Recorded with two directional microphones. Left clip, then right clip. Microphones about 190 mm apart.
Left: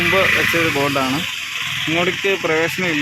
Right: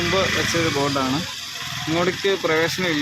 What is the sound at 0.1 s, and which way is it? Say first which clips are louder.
Speech: left 5 dB; 15° left (ahead or behind).